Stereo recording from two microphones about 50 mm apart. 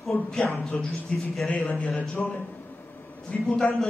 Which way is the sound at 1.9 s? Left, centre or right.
Centre.